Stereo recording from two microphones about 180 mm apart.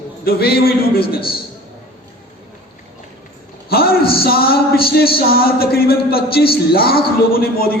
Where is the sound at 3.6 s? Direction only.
55° left (ahead or behind).